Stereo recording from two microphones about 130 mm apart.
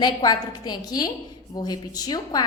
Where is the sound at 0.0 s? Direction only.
30° left (ahead or behind).